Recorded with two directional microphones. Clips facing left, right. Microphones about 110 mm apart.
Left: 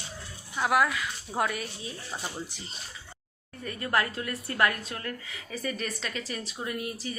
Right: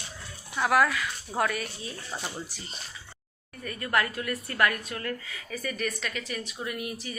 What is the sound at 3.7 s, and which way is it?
A woman's voice, 25° left (ahead or behind).